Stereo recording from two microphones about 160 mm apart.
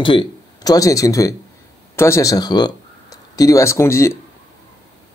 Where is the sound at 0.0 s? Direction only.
30° left (ahead or behind).